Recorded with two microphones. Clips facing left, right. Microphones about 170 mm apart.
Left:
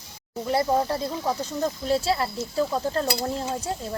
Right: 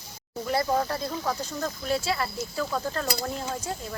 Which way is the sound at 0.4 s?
20° left (ahead or behind).